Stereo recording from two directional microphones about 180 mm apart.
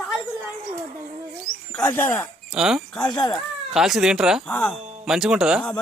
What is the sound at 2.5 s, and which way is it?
Speech, 5° right (ahead or behind).